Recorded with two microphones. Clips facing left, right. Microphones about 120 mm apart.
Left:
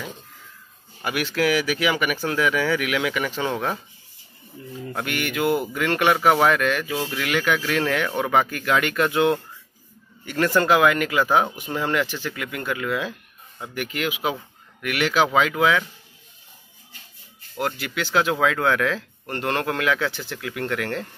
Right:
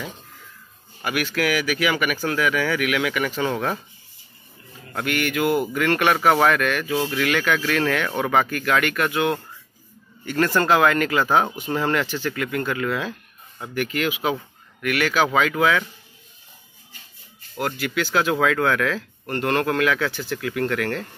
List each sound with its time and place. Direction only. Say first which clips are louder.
1.0 s speech: left 1 dB; 25° left (ahead or behind)
3.5 s speech: right 1 dB; 5° left (ahead or behind)
4.9 s speech: right 3 dB; 20° left (ahead or behind)
17.6 s speech: right 2 dB; 20° left (ahead or behind)